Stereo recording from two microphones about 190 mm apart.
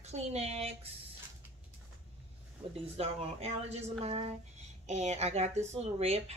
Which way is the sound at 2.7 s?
30° right (ahead or behind).